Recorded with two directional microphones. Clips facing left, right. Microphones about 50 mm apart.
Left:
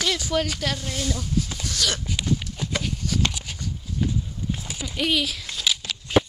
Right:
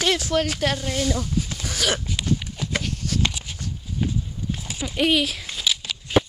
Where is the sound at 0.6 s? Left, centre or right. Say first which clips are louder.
Right 4 dB; centre.